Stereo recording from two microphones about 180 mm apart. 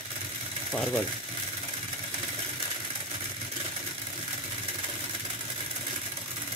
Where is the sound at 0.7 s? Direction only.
5° left (ahead or behind).